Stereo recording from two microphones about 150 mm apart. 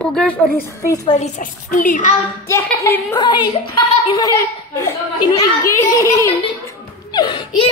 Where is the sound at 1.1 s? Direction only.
50° left (ahead or behind).